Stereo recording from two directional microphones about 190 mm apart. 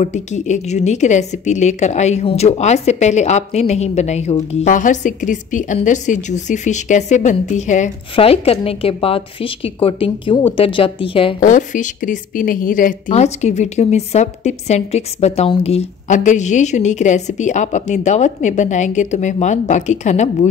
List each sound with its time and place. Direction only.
0.0 s a woman's voice: 40° left (ahead or behind)
11.3 s a woman's voice: 40° left (ahead or behind)